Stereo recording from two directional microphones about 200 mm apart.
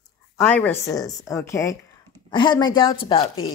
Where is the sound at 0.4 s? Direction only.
5° left (ahead or behind).